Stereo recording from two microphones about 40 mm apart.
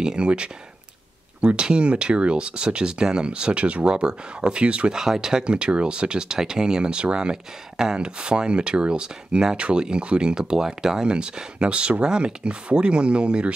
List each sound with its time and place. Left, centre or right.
0.0 s speech: right
4.9 s speech: centre
5.5 s speech: right
11.1 s speech: right